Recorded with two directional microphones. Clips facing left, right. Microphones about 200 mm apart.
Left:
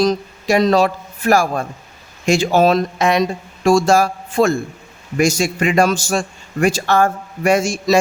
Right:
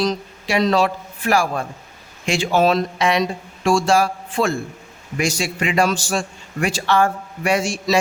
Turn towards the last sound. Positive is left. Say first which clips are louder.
# left 4 dB
turn(degrees=45)  # may be behind; listen again after turning